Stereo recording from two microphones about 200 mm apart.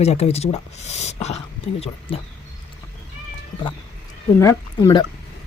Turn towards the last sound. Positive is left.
turn(degrees=20)  # may be behind; listen again after turning